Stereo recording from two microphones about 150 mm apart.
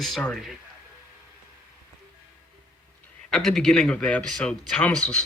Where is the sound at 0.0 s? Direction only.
5° left (ahead or behind).